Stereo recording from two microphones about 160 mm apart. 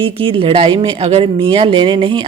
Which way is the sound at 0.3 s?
35° right (ahead or behind).